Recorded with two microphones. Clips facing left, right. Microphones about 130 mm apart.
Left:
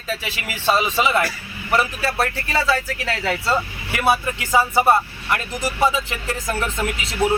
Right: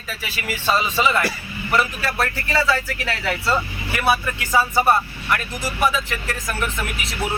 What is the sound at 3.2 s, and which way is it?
Speech, 20° left (ahead or behind).